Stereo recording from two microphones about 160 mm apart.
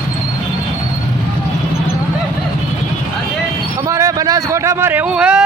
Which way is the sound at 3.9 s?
20° right (ahead or behind).